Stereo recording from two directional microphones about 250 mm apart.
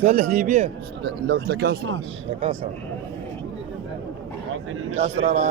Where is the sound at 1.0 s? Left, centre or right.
Right.